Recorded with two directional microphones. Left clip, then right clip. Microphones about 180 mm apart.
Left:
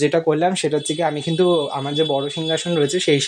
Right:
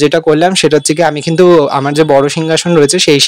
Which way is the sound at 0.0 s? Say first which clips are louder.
Right 9 dB; 35° right (ahead or behind).